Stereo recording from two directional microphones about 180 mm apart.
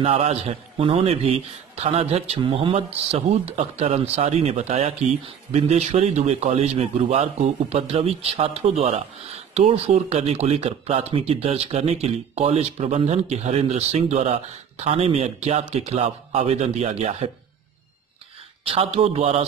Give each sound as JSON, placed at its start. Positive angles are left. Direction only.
{"t": 0.0, "sound": "a man's voice", "side_deg": -30}
{"t": 18.7, "sound": "a man's voice", "side_deg": -30}